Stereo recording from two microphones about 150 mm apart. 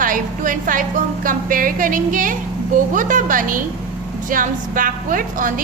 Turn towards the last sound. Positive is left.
turn(degrees=-65)  # may be behind; listen again after turning